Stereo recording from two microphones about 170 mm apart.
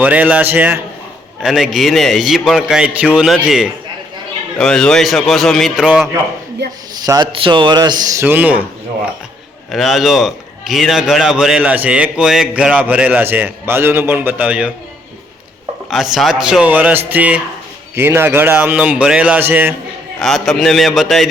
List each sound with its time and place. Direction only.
0.0 s a man's voice: 10° right (ahead or behind)
6.9 s a man's voice: 25° right (ahead or behind)
8.2 s a man's voice: 10° right (ahead or behind)
9.7 s a man's voice: centre (ahead or behind)
15.9 s a man's voice: centre (ahead or behind)
20.2 s a man's voice: centre (ahead or behind)